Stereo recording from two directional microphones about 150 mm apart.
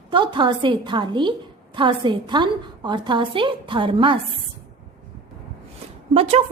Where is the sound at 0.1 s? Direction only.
35° right (ahead or behind).